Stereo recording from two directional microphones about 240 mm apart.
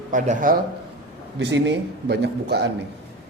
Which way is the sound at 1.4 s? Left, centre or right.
Right.